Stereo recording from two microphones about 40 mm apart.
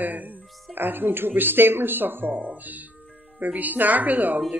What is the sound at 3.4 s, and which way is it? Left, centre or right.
Speech, right.